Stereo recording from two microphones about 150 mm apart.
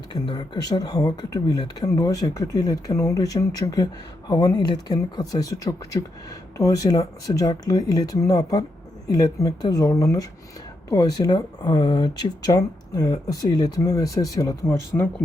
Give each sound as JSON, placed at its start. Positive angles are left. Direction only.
{"t": 0.1, "sound": "speech", "side_deg": 30}